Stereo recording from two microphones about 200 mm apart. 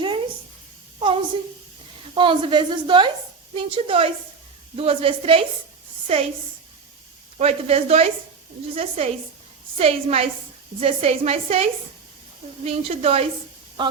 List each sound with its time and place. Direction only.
0.9 s a sound: 25° right (ahead or behind)
2.1 s a woman's voice: 25° right (ahead or behind)
7.3 s a woman's voice: 30° right (ahead or behind)